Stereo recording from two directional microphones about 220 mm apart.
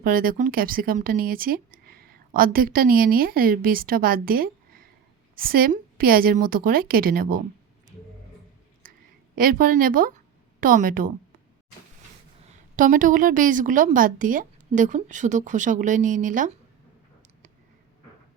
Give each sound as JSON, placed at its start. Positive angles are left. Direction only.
{"t": 0.0, "sound": "a woman's voice", "side_deg": -40}
{"t": 8.8, "sound": "a sound", "side_deg": -40}
{"t": 9.4, "sound": "a woman's voice", "side_deg": -40}
{"t": 12.7, "sound": "a woman's voice", "side_deg": -35}